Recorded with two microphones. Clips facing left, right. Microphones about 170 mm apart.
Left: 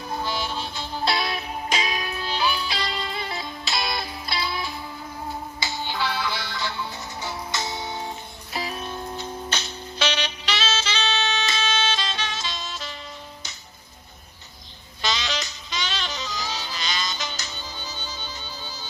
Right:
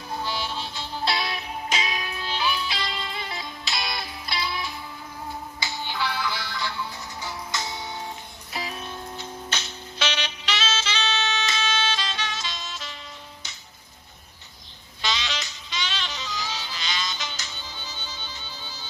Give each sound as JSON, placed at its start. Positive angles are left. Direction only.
{"t": 0.2, "sound": "music", "side_deg": 50}
{"t": 3.9, "sound": "music", "side_deg": 30}
{"t": 5.6, "sound": "music", "side_deg": 30}
{"t": 15.0, "sound": "music", "side_deg": 40}